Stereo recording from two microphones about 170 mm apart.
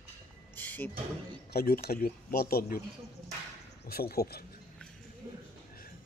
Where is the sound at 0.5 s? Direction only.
10° left (ahead or behind).